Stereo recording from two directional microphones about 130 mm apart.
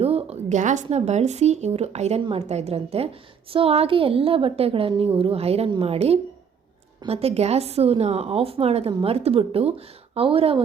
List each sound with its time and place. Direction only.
0.0 s a woman's voice: 50° right (ahead or behind)
8.9 s a woman's voice: 35° right (ahead or behind)
9.1 s a woman's voice: 50° right (ahead or behind)